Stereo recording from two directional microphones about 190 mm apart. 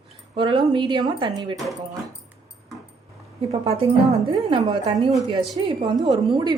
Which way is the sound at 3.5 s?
30° right (ahead or behind).